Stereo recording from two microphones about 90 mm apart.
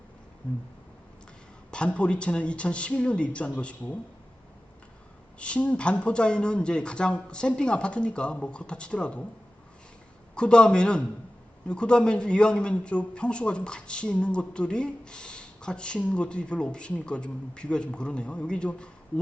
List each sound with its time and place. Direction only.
1.7 s a man's voice: 10° left (ahead or behind)
5.4 s a man's voice: 15° left (ahead or behind)
10.3 s a man's voice: 10° left (ahead or behind)